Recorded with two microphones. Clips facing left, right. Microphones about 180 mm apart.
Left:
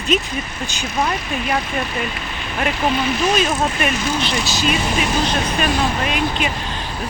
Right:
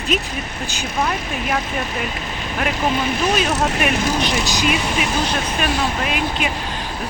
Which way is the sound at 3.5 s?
75° right (ahead or behind).